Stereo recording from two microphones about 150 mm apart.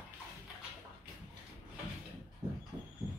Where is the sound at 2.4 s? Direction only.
25° right (ahead or behind).